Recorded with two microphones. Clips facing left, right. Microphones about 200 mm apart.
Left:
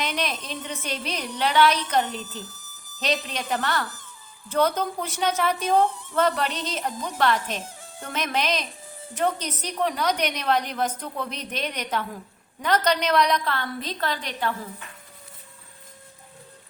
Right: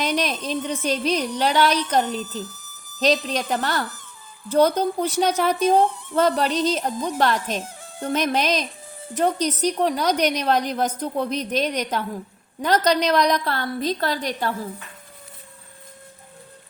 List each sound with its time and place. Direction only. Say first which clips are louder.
0.0 s a woman's voice: right 5 dB; 40° right (ahead or behind)